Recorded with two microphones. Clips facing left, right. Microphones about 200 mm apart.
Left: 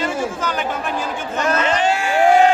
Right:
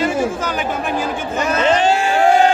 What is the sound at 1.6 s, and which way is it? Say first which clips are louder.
Crowd: right 8 dB; 30° right (ahead or behind).